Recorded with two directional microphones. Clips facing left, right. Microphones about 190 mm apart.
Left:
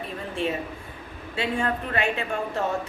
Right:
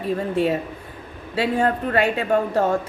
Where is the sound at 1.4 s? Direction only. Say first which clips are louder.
Right 6 dB; 40° right (ahead or behind).